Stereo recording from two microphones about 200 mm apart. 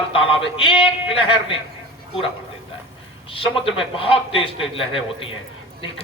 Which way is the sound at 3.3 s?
25° left (ahead or behind).